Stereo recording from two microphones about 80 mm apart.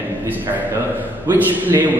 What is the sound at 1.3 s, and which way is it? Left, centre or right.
Speech, right.